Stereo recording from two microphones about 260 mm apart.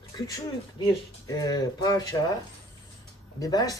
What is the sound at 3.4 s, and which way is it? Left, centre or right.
Speech, centre.